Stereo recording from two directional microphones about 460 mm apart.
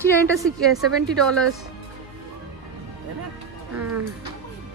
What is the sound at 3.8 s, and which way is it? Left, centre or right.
Music, right.